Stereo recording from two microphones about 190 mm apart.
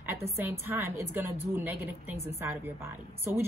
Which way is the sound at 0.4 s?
10° right (ahead or behind).